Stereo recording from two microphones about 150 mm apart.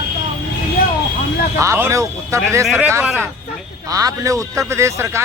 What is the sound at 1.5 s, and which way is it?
A man's voice, 20° right (ahead or behind).